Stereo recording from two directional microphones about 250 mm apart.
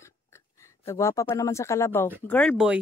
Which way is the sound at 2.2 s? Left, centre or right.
Centre.